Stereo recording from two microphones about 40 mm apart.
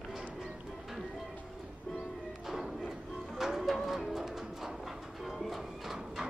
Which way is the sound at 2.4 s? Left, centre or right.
Centre.